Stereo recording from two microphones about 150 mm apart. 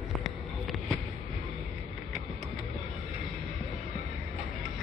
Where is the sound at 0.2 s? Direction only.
Centre (ahead or behind).